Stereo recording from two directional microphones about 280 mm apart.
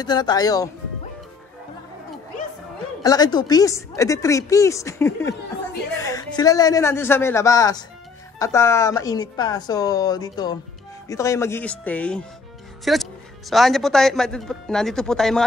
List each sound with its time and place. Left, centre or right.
0.0 s speech: centre
3.0 s speech: centre